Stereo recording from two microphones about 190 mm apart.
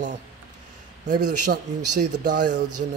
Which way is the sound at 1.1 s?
60° right (ahead or behind).